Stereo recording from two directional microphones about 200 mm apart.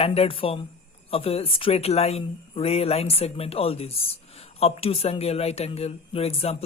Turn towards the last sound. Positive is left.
turn(degrees=30)  # may be behind; listen again after turning